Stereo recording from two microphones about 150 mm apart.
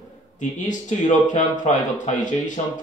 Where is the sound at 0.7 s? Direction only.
55° left (ahead or behind).